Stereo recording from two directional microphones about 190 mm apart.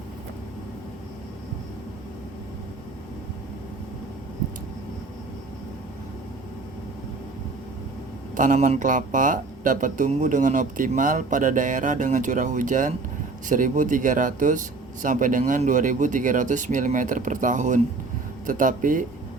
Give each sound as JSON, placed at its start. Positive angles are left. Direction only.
{"t": 8.4, "sound": "speech", "side_deg": -45}